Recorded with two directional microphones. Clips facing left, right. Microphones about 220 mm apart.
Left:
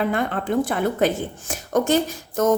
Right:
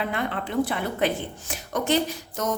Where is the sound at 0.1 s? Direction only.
45° left (ahead or behind).